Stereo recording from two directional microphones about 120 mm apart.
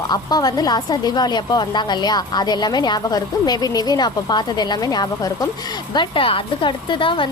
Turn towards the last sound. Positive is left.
turn(degrees=45)  # may be behind; listen again after turning